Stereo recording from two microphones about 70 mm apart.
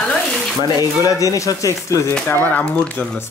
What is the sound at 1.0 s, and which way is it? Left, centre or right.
Speech, left.